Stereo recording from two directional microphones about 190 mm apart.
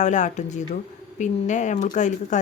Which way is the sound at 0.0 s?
40° left (ahead or behind).